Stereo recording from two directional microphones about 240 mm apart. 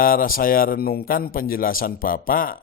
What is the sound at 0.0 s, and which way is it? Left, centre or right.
Mantra, left.